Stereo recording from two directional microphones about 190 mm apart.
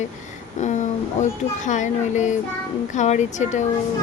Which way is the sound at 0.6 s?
40° left (ahead or behind).